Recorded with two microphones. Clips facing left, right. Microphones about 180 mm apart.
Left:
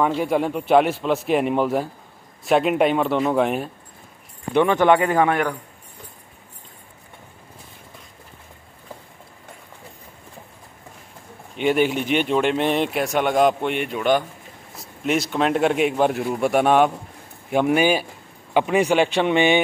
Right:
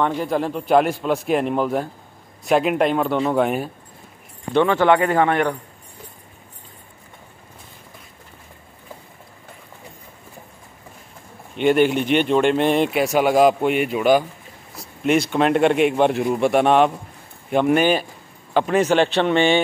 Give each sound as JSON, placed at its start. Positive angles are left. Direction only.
{"t": 0.2, "sound": "speech", "side_deg": 5}
{"t": 4.6, "sound": "speech", "side_deg": 15}
{"t": 11.5, "sound": "speech", "side_deg": 5}